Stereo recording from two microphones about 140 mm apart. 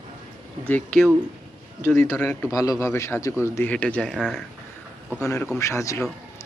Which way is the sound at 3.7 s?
10° left (ahead or behind).